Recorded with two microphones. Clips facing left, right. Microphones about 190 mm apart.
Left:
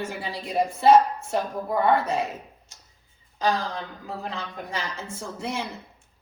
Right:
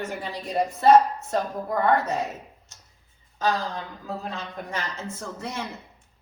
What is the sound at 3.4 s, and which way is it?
Speech, 15° left (ahead or behind).